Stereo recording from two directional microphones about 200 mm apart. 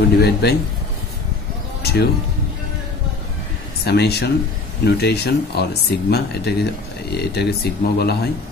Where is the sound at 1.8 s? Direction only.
50° left (ahead or behind).